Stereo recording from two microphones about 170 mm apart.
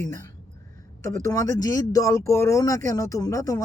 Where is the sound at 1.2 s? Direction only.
20° left (ahead or behind).